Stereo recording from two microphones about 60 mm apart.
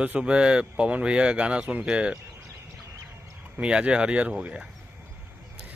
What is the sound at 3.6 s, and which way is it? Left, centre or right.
Speech, centre.